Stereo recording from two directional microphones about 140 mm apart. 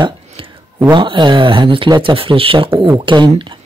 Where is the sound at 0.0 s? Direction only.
35° right (ahead or behind).